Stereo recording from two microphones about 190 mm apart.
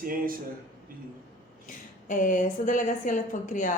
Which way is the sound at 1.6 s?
45° left (ahead or behind).